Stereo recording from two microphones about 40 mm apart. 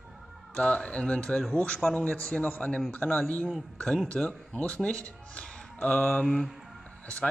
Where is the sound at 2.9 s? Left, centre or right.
Left.